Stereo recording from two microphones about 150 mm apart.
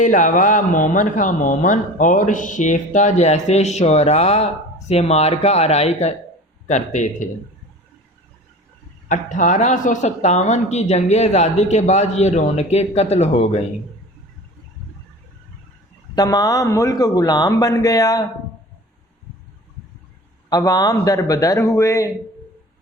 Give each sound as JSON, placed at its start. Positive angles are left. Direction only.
{"t": 0.0, "sound": "speech", "side_deg": 60}
{"t": 9.0, "sound": "speech", "side_deg": 55}
{"t": 16.1, "sound": "speech", "side_deg": 25}
{"t": 20.5, "sound": "speech", "side_deg": 25}